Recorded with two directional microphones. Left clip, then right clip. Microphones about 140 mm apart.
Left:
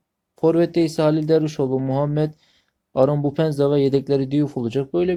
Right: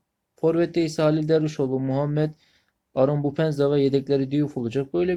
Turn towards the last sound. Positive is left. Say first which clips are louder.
# left 3 dB
turn(degrees=30)  # may be behind; listen again after turning